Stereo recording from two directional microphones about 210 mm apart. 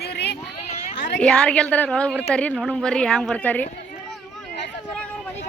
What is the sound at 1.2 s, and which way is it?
A woman's voice, 5° left (ahead or behind).